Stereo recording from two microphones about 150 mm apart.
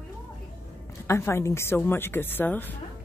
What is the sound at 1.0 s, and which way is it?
Speech, 20° left (ahead or behind).